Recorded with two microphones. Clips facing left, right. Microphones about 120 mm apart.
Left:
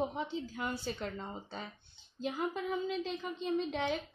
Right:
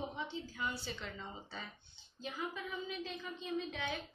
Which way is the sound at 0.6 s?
45° left (ahead or behind).